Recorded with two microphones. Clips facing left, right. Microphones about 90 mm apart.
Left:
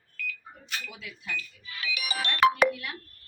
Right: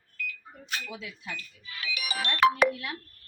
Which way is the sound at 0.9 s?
25° right (ahead or behind).